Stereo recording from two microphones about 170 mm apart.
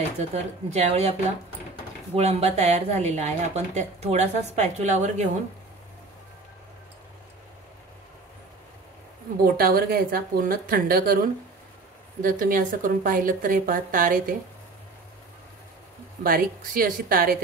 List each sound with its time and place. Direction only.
0.3 s speech: 40° right (ahead or behind)
2.1 s speech: 40° right (ahead or behind)
9.4 s a woman's voice: 60° right (ahead or behind)
12.2 s speech: 55° right (ahead or behind)
16.2 s a woman's voice: 55° right (ahead or behind)